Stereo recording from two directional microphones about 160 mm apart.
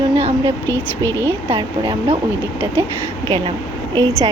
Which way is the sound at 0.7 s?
15° left (ahead or behind).